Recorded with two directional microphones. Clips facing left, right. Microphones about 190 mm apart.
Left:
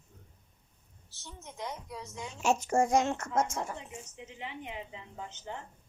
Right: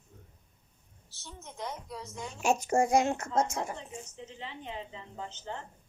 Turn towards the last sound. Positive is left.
turn(degrees=15)  # may be behind; listen again after turning